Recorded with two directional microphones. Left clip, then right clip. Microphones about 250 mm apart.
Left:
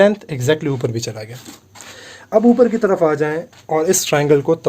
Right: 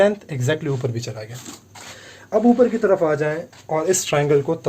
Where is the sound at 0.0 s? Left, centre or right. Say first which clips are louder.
Left 4 dB; left.